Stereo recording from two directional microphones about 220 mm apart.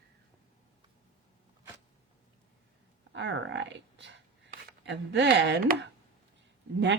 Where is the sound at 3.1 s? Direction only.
55° right (ahead or behind).